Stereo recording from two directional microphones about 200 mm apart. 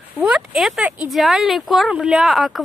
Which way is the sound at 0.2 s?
5° right (ahead or behind).